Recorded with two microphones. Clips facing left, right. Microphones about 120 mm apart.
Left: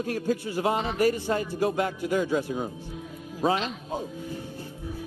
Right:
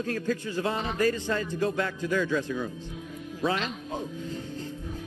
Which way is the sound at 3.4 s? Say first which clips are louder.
Left 3 dB; 40° left (ahead or behind).